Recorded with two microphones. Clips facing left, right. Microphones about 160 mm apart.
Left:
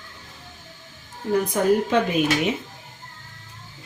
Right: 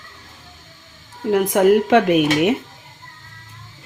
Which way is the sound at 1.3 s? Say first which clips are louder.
Right 6 dB; 90° right.